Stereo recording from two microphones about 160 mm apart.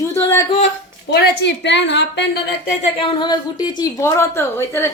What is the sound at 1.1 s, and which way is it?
A woman's voice, 90° left.